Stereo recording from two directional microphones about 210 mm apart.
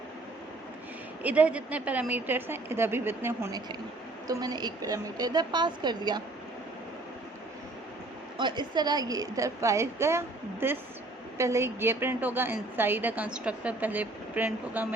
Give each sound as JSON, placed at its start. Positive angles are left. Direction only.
{"t": 1.2, "sound": "a woman's voice", "side_deg": -5}
{"t": 8.4, "sound": "a woman's voice", "side_deg": -20}